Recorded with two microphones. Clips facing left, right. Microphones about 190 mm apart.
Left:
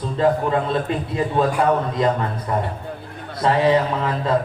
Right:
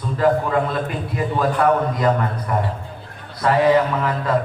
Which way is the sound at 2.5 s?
25° left (ahead or behind).